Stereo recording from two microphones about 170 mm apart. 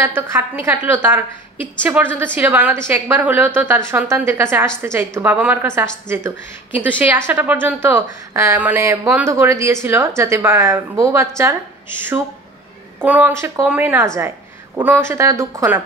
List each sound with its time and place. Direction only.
0.0 s a woman's voice: 15° right (ahead or behind)
13.0 s a woman's voice: 10° right (ahead or behind)